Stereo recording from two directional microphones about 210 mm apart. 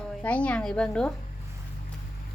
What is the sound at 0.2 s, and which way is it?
Speech, 5° left (ahead or behind).